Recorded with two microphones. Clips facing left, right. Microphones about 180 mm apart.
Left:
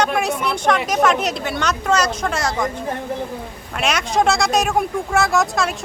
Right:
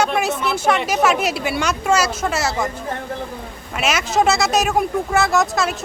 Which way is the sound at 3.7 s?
5° right (ahead or behind).